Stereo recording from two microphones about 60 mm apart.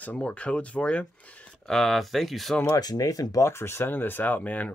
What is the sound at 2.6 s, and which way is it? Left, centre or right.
Speech, left.